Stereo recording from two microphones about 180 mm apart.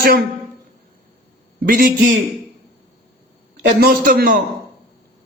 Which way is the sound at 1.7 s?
50° right (ahead or behind).